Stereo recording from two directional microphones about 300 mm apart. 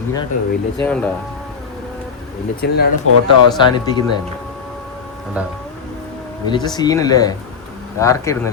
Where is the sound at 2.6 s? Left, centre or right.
Left.